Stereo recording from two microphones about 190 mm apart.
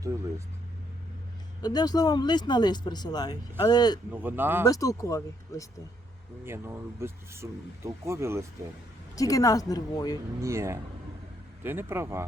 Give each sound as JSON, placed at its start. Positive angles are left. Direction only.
{"t": 1.6, "sound": "speech", "side_deg": 20}
{"t": 4.1, "sound": "speech", "side_deg": -10}
{"t": 4.6, "sound": "speech", "side_deg": 20}
{"t": 6.4, "sound": "speech", "side_deg": -10}
{"t": 9.1, "sound": "speech", "side_deg": 15}
{"t": 10.4, "sound": "speech", "side_deg": -15}